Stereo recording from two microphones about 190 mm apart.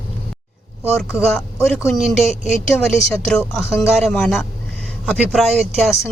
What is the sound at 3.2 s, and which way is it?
Speech, centre (ahead or behind).